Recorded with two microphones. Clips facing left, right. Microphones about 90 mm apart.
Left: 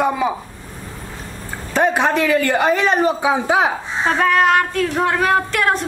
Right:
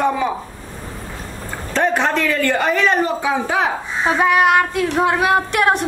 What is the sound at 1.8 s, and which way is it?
Speech, 15° left (ahead or behind).